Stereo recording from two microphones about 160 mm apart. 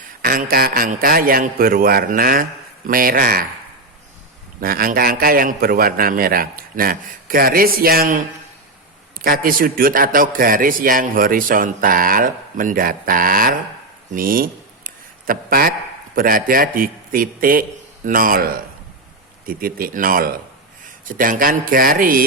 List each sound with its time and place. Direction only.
0.2 s a man's voice: 65° right (ahead or behind)
4.6 s a man's voice: 65° right (ahead or behind)
9.2 s a man's voice: 65° right (ahead or behind)
14.1 s a sound: 60° right (ahead or behind)
16.1 s a man's voice: 60° right (ahead or behind)